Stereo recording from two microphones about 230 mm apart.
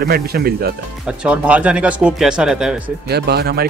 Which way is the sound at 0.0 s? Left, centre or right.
Right.